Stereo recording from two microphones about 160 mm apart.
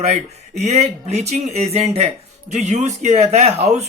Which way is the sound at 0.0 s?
45° right (ahead or behind).